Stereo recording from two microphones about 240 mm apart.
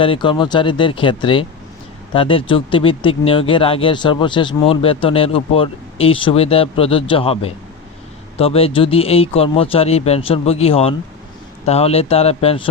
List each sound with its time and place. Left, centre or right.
0.0 s speech: left